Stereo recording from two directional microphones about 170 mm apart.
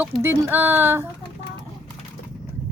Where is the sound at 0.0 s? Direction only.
10° right (ahead or behind).